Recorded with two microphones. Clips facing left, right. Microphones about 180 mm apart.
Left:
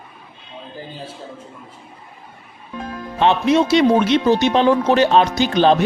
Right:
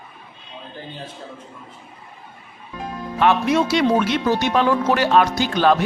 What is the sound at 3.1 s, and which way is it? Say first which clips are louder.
Speech: left 2 dB; 25° left (ahead or behind).